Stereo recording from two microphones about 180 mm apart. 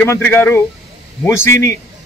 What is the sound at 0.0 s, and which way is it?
A man's voice, 10° left (ahead or behind).